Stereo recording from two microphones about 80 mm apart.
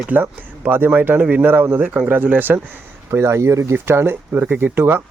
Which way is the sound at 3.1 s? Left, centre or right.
Right.